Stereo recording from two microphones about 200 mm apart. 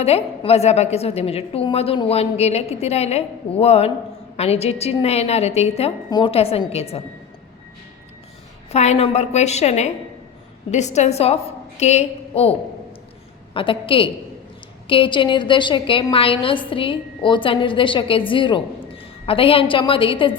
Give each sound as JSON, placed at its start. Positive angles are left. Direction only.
{"t": 0.0, "sound": "a woman's voice", "side_deg": 30}
{"t": 8.7, "sound": "a woman's voice", "side_deg": 35}